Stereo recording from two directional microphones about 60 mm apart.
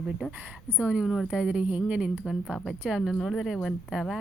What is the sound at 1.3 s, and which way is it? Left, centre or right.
Speech, centre.